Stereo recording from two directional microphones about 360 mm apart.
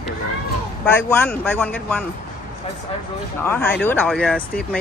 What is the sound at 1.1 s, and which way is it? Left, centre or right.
Speech, centre.